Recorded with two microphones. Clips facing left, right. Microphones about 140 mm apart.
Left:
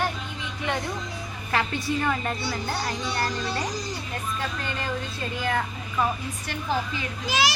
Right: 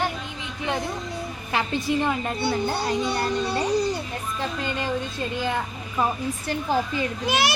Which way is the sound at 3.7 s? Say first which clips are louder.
Right 10 dB; 65° right (ahead or behind).